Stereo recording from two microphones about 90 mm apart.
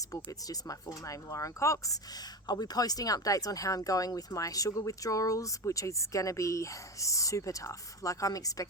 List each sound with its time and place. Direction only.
0.1 s speech: 40° left (ahead or behind)